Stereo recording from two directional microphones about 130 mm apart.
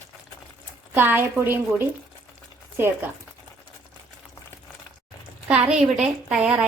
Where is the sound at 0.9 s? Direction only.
15° right (ahead or behind).